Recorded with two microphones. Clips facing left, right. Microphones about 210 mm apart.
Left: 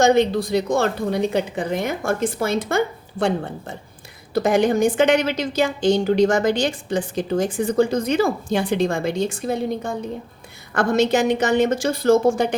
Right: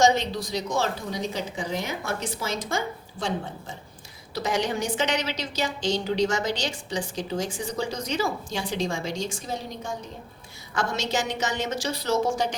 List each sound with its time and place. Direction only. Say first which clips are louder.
0.0 s a woman's voice: left 6 dB; 55° left (ahead or behind)